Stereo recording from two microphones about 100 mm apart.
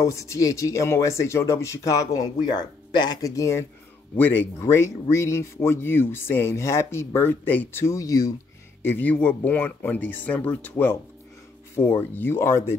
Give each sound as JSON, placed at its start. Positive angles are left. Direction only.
{"t": 0.0, "sound": "speech", "side_deg": 30}
{"t": 4.2, "sound": "speech", "side_deg": 20}
{"t": 8.8, "sound": "speech", "side_deg": 20}